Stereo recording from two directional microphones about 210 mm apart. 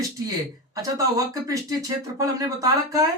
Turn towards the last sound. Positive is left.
turn(degrees=-15)  # may be behind; listen again after turning